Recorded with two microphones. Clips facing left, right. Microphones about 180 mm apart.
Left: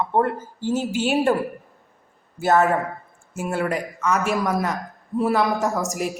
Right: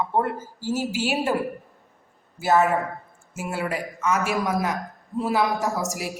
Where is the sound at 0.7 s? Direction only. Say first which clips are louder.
Left 3 dB; 5° right (ahead or behind).